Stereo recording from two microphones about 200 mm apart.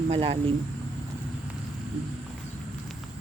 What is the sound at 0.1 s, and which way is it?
Speech, 30° right (ahead or behind).